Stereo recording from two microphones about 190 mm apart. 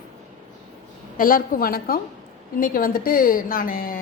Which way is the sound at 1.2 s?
45° left (ahead or behind).